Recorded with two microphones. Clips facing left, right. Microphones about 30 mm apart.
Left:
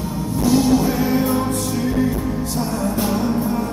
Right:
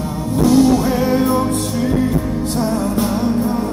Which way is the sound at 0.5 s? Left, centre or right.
Centre.